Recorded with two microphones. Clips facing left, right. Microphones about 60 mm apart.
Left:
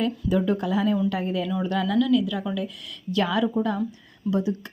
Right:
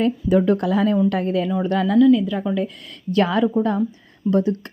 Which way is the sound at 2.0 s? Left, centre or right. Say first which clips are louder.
Right 8 dB; right.